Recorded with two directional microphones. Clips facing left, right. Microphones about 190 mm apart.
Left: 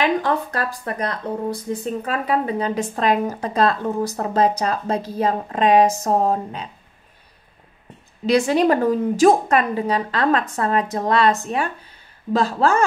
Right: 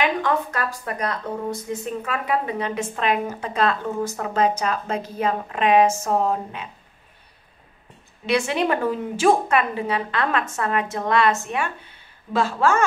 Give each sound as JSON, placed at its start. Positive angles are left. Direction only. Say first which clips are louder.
{"t": 0.0, "sound": "a woman's voice", "louder": "left 2 dB", "side_deg": 35}
{"t": 8.3, "sound": "a woman's voice", "louder": "left 5 dB", "side_deg": 35}